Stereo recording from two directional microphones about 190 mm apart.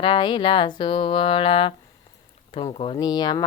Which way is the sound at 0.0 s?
25° left (ahead or behind).